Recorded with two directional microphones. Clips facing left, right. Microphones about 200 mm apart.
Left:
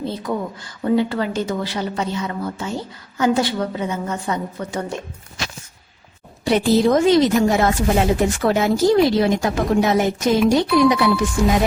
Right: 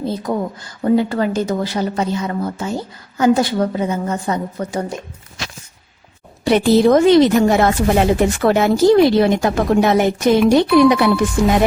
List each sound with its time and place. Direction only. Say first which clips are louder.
0.0 s a woman's voice: right 3 dB; 40° right (ahead or behind)
6.4 s speech: right 3 dB; 65° right (ahead or behind)